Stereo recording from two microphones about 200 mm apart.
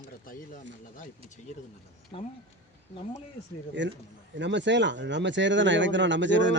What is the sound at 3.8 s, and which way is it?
Speech, 65° right (ahead or behind).